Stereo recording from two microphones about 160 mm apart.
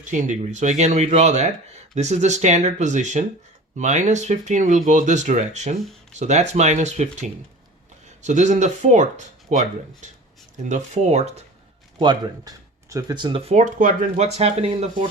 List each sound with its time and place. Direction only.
0.0 s speech: 50° right (ahead or behind)
11.9 s speech: 30° right (ahead or behind)
13.5 s speech: 50° right (ahead or behind)